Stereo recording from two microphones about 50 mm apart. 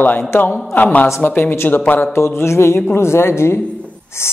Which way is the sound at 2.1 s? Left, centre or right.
Left.